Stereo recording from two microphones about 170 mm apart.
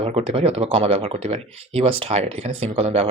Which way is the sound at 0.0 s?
35° right (ahead or behind).